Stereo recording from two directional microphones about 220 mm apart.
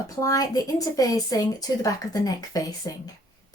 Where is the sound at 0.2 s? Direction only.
15° left (ahead or behind).